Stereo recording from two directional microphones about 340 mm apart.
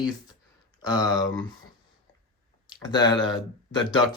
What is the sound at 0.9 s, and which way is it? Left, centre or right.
Speech, centre.